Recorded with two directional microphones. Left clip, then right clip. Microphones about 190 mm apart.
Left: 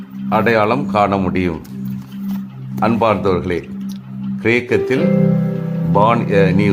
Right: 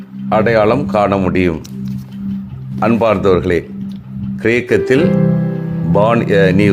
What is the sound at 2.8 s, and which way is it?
Speech, 15° right (ahead or behind).